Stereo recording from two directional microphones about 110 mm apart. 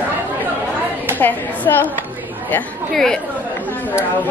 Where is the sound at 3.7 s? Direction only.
20° left (ahead or behind).